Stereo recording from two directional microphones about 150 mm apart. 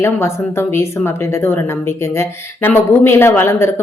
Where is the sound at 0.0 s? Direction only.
15° left (ahead or behind).